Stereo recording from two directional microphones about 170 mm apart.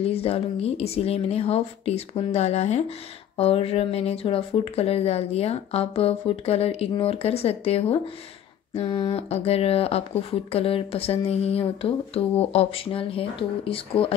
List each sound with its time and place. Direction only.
0.0 s speech: 35° left (ahead or behind)